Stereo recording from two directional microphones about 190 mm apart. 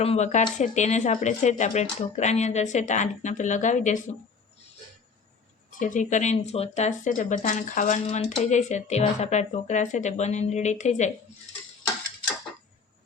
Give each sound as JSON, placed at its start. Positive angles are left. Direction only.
{"t": 0.0, "sound": "speech", "side_deg": 35}
{"t": 5.8, "sound": "speech", "side_deg": 40}